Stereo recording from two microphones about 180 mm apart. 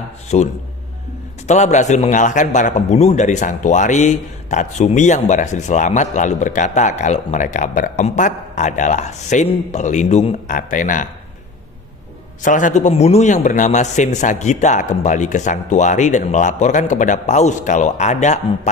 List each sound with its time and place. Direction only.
0.3 s a man's voice: 40° left (ahead or behind)
1.5 s a man's voice: 40° left (ahead or behind)
12.4 s a man's voice: 45° left (ahead or behind)